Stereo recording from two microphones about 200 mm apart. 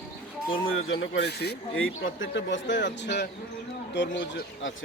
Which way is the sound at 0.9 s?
65° left (ahead or behind).